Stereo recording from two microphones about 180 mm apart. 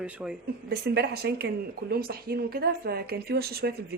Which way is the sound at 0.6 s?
65° right (ahead or behind).